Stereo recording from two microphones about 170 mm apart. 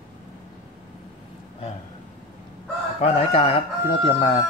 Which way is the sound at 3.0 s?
35° left (ahead or behind).